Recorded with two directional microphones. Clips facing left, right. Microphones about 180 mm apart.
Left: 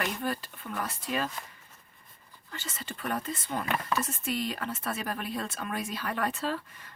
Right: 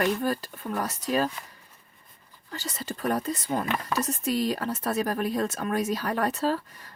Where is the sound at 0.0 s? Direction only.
40° right (ahead or behind).